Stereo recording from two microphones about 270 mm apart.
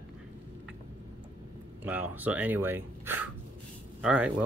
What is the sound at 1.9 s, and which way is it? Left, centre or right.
Speech, centre.